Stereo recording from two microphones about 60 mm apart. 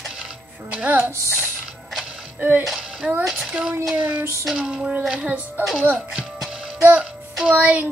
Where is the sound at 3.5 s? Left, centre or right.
Centre.